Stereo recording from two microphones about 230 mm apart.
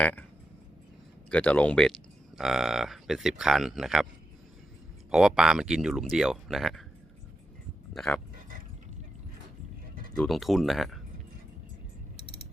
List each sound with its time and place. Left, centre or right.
0.0 s a sound: centre
1.3 s speech: centre
5.1 s speech: centre
7.9 s speech: centre
10.2 s speech: centre